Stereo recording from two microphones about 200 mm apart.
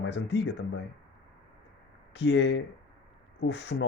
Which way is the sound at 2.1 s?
60° left (ahead or behind).